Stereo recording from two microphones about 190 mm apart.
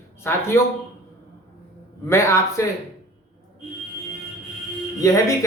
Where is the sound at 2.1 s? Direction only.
15° left (ahead or behind).